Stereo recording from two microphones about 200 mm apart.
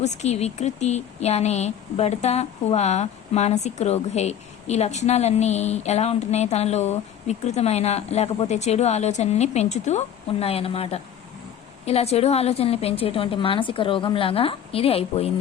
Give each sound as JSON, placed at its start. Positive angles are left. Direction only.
{"t": 0.0, "sound": "a woman's voice", "side_deg": 35}